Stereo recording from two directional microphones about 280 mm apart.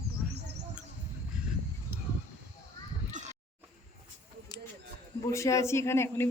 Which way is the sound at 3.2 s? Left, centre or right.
Right.